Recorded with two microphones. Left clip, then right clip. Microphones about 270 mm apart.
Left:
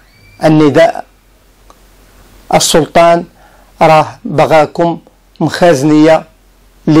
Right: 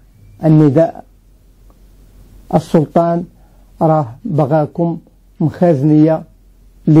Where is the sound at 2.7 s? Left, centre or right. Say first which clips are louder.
Left 5 dB; left.